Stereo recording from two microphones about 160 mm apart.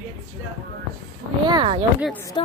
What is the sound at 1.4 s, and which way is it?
Speech, 30° right (ahead or behind).